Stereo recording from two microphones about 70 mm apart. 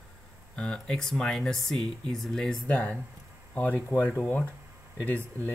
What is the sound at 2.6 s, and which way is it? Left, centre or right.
Speech, left.